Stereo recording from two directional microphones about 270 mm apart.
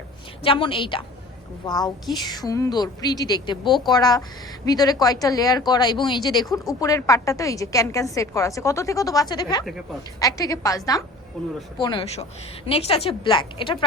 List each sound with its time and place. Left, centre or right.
0.4 s a woman's voice: centre
9.6 s speech: centre
10.2 s a woman's voice: centre
11.4 s speech: centre
11.8 s a woman's voice: centre